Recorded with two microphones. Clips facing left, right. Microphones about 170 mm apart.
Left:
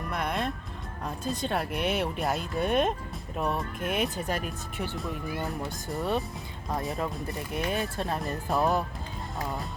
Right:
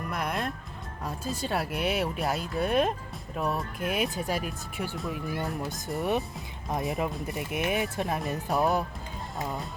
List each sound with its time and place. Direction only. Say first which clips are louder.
0.1 s music: left 1 dB; 5° right (ahead or behind)
1.0 s speech: left 1 dB; 5° right (ahead or behind)
6.0 s speech: right 1 dB; 15° right (ahead or behind)
8.2 s speech: even; centre (ahead or behind)